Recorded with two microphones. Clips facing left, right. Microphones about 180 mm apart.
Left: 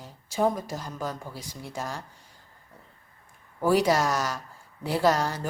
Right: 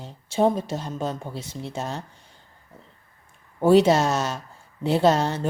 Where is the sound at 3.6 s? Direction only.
25° right (ahead or behind).